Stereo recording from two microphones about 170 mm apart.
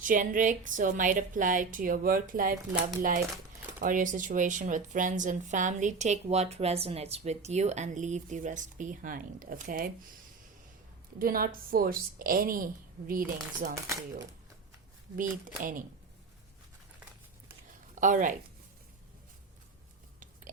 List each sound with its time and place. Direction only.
0.0 s speech: 50° right (ahead or behind)
11.2 s a woman's voice: 60° right (ahead or behind)
15.1 s speech: 50° right (ahead or behind)
18.0 s speech: 50° right (ahead or behind)